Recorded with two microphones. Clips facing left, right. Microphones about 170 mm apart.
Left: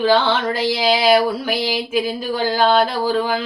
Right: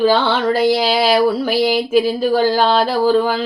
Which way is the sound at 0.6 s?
45° right (ahead or behind).